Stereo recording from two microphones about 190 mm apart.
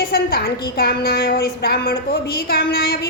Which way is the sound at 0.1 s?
55° left (ahead or behind).